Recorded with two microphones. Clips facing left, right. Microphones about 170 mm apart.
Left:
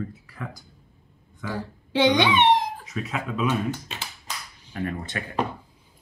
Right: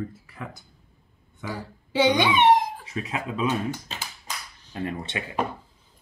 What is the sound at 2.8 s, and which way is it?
Speech, 30° right (ahead or behind).